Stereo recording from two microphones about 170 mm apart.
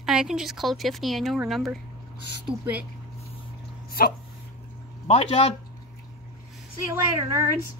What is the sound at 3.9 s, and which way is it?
Dog, 60° left (ahead or behind).